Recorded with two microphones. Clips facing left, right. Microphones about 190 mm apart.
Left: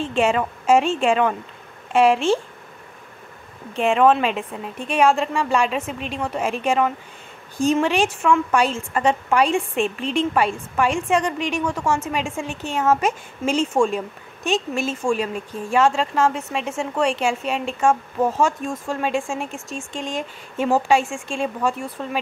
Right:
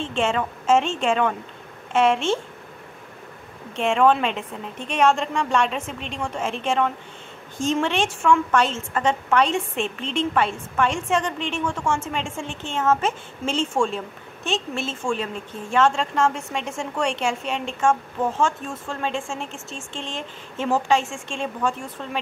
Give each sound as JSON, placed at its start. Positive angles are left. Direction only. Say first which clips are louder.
{"t": 0.0, "sound": "a woman's voice", "louder": "left 3 dB", "side_deg": 5}
{"t": 3.7, "sound": "a woman's voice", "louder": "left 2 dB", "side_deg": 5}